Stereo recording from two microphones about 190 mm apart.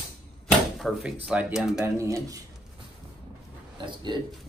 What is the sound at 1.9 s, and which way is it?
Speech, 15° right (ahead or behind).